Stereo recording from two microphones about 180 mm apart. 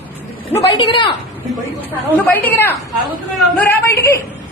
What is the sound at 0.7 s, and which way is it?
Speech, 25° left (ahead or behind).